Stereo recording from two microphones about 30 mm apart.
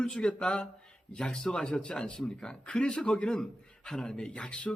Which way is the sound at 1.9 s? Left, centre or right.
Left.